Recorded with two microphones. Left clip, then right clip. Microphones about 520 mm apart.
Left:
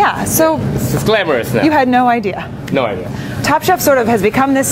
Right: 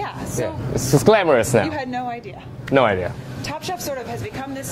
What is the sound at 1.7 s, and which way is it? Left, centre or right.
Speech, left.